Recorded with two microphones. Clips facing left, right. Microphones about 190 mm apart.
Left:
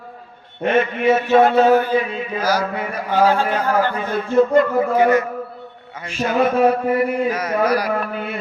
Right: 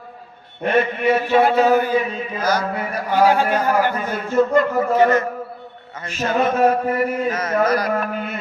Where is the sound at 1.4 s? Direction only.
10° right (ahead or behind).